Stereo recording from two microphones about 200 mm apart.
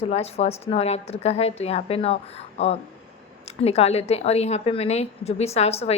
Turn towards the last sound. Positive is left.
turn(degrees=30)  # may be behind; listen again after turning